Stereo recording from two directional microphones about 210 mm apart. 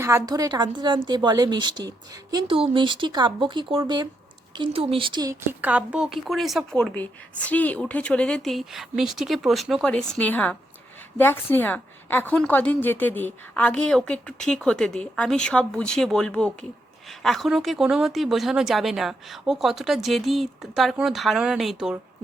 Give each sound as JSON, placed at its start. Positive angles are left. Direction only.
{"t": 0.0, "sound": "a woman's voice", "side_deg": -15}